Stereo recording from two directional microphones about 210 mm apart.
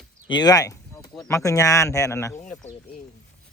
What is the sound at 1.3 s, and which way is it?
Speech, 15° left (ahead or behind).